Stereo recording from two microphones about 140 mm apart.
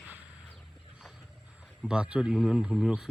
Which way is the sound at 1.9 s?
5° right (ahead or behind).